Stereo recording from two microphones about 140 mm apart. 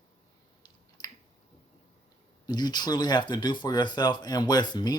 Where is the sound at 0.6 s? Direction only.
30° left (ahead or behind).